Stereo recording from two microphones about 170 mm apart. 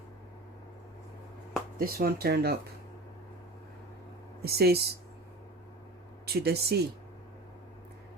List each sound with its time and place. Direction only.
1.8 s speech: 60° right (ahead or behind)
4.4 s speech: 65° right (ahead or behind)
6.2 s speech: 70° right (ahead or behind)